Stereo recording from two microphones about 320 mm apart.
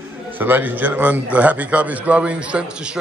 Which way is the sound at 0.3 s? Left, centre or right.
Centre.